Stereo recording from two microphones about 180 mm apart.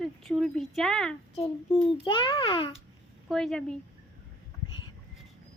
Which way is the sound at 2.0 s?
30° left (ahead or behind).